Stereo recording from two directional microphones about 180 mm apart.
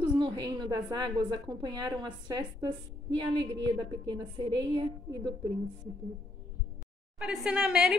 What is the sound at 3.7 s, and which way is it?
A woman's voice, 20° right (ahead or behind).